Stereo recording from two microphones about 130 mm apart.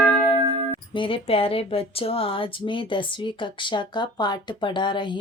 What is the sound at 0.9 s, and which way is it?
A woman's voice, 40° left (ahead or behind).